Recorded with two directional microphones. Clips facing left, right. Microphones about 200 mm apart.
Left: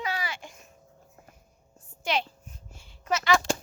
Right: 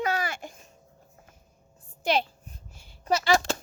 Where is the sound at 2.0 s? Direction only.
35° right (ahead or behind).